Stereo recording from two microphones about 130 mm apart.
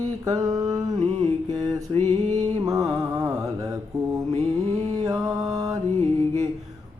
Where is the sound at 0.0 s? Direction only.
30° right (ahead or behind).